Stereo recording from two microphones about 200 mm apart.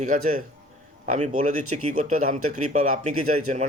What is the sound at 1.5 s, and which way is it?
Speech, 90° right.